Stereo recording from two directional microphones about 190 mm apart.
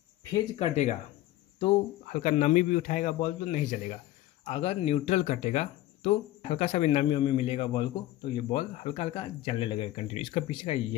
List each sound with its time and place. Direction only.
0.6 s speech: 35° left (ahead or behind)